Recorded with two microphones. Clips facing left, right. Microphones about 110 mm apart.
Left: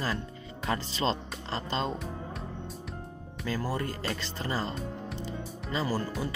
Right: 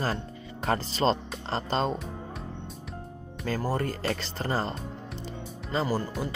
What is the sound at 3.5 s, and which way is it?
Speech, 50° right (ahead or behind).